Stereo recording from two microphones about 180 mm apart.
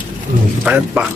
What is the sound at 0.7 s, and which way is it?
Speech, 10° right (ahead or behind).